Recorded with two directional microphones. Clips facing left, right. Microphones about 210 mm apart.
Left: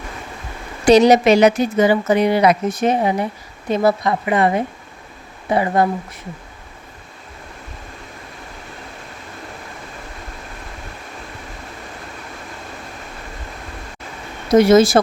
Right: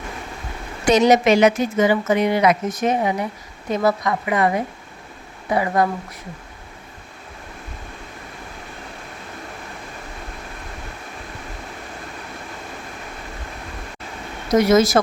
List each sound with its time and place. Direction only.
0.9 s a woman's voice: 35° left (ahead or behind)
14.5 s a woman's voice: 30° left (ahead or behind)